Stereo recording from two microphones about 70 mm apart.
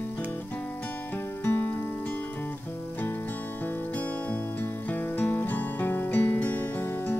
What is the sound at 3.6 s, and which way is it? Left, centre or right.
Music, left.